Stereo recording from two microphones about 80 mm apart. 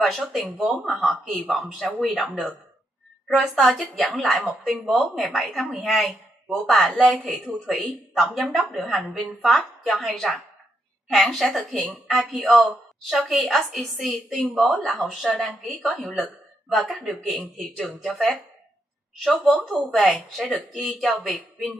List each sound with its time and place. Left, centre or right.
0.0 s speech: centre
12.1 s speech: centre
12.4 s speech: centre
15.8 s speech: centre
16.1 s speech: centre